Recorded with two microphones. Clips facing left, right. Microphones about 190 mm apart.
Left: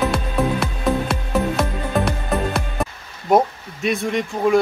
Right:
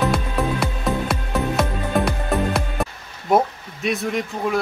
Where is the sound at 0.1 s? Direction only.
Centre (ahead or behind).